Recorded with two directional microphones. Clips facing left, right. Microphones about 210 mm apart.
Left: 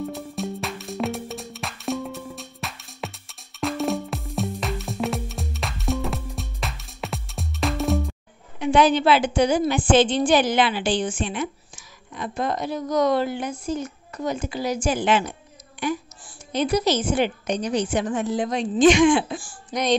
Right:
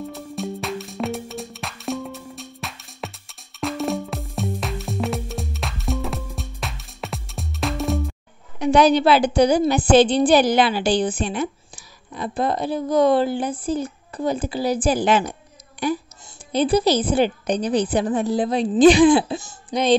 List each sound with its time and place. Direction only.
0.1 s music: centre (ahead or behind)
8.5 s a woman's voice: 40° right (ahead or behind)